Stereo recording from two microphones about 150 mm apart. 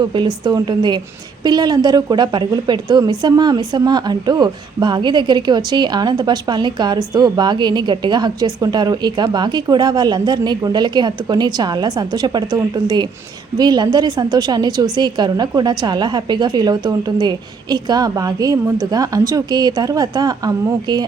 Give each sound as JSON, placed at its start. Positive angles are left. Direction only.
{"t": 0.0, "sound": "a woman's voice", "side_deg": -30}